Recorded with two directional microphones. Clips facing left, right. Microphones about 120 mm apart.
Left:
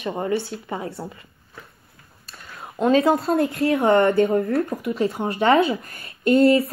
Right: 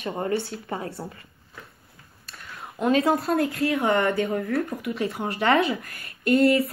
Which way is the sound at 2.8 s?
25° left (ahead or behind).